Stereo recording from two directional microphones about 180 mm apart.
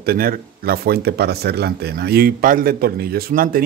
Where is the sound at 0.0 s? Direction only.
55° right (ahead or behind).